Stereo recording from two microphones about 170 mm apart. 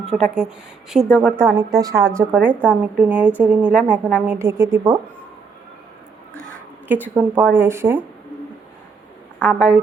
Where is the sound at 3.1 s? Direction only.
10° right (ahead or behind).